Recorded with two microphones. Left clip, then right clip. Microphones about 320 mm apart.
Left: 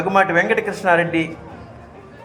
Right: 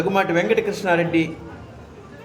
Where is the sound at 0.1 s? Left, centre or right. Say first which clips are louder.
Left 5 dB; centre.